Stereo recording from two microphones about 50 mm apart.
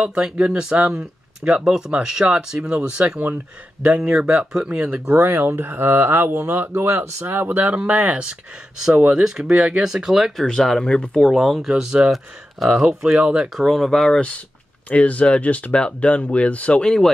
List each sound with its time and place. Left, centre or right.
0.0 s speech: centre
5.1 s speech: right
9.1 s speech: centre
10.6 s speech: centre
13.6 s speech: centre
14.9 s speech: left
16.8 s speech: centre